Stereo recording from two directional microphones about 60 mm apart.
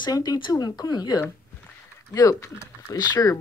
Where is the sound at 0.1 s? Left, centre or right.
Left.